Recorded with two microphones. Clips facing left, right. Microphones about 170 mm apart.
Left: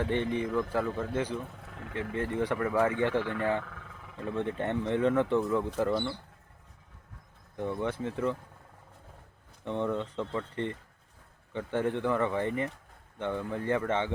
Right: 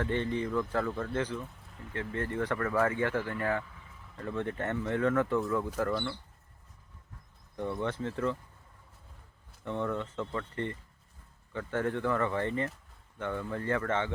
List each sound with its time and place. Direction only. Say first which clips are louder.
0.0 s speech: left 2 dB; 15° left (ahead or behind)
1.5 s speech: left 5 dB; 70° left (ahead or behind)
2.1 s speech: left 2 dB; 15° left (ahead or behind)
3.6 s a sound: left 3 dB; 75° left (ahead or behind)
4.2 s speech: left 2 dB; 15° left (ahead or behind)
7.5 s speech: left 1 dB; 15° left (ahead or behind)
9.6 s speech: left 2 dB; 20° left (ahead or behind)